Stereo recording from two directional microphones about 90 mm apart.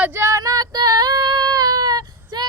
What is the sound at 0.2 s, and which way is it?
Female singing, 40° right (ahead or behind).